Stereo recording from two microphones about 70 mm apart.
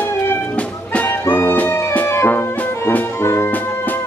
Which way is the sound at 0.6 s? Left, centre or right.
Centre.